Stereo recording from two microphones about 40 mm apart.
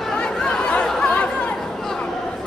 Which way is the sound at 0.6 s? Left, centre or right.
Left.